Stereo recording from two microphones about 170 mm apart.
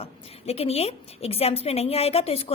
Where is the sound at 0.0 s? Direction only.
35° left (ahead or behind).